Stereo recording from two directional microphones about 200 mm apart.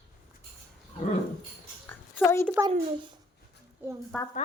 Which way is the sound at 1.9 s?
10° left (ahead or behind).